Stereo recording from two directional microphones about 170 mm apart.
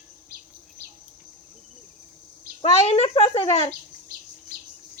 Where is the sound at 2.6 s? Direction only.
35° left (ahead or behind).